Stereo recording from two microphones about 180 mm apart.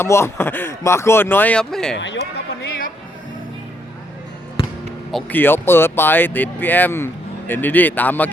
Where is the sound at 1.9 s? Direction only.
90° left.